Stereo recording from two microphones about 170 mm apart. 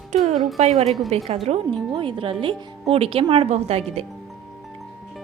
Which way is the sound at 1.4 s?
35° right (ahead or behind).